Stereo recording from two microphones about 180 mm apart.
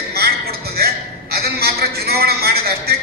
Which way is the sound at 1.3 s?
60° right (ahead or behind).